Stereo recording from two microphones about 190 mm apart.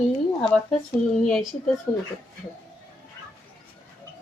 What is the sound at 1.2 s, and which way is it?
Speech, centre (ahead or behind).